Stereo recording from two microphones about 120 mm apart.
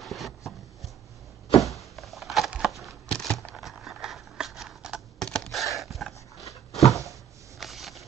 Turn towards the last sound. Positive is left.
turn(degrees=0)  # may be behind; listen again after turning